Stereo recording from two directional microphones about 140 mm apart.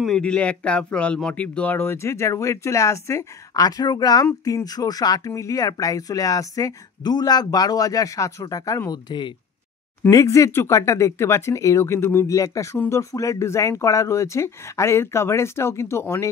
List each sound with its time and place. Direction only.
0.0 s speech: 5° left (ahead or behind)